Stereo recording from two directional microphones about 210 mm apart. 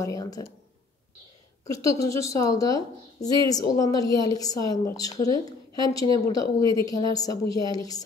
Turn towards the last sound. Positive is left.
turn(degrees=15)  # may be behind; listen again after turning